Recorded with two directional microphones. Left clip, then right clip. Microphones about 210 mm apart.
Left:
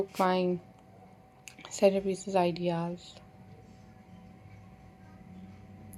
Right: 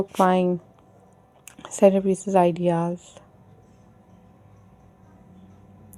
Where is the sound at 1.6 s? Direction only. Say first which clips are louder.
Right 8 dB; 35° right (ahead or behind).